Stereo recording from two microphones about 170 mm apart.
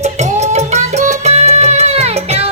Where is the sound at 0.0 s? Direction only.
40° right (ahead or behind).